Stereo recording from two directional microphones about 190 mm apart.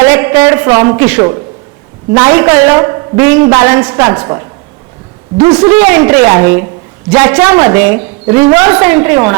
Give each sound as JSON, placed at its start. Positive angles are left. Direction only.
{"t": 0.0, "sound": "a woman's voice", "side_deg": -15}